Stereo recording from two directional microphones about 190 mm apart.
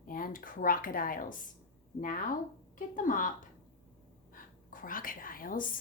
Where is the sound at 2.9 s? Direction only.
45° left (ahead or behind).